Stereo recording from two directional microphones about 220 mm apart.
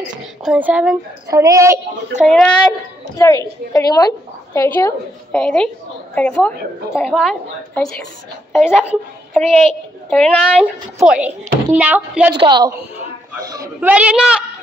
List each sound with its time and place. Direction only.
0.4 s a child's voice: 5° right (ahead or behind)
2.2 s a child's voice: centre (ahead or behind)
3.2 s a woman's voice: 15° left (ahead or behind)
5.3 s a child's voice: 5° left (ahead or behind)
12.4 s a woman's voice: 20° right (ahead or behind); by 14.4 s 5° right (ahead or behind)